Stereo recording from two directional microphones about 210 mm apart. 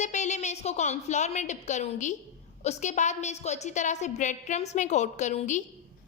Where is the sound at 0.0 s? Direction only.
35° left (ahead or behind).